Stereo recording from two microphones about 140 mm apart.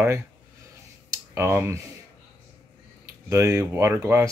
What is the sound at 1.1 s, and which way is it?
Clicking, 20° right (ahead or behind).